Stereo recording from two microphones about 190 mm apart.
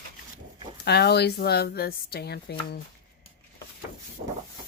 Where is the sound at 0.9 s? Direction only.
60° left (ahead or behind).